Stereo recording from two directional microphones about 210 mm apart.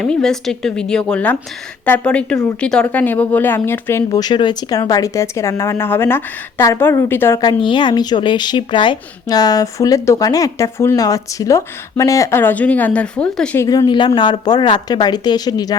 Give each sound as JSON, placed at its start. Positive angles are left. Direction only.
{"t": 0.0, "sound": "a woman's voice", "side_deg": 5}
{"t": 7.3, "sound": "a woman's voice", "side_deg": 20}
{"t": 13.7, "sound": "speech", "side_deg": 20}